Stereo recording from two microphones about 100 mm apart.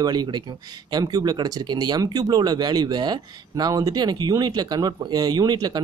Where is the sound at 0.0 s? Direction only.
45° right (ahead or behind).